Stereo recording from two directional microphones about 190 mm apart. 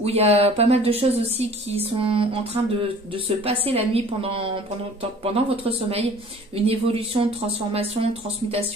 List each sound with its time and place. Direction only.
0.0 s speech: 30° right (ahead or behind)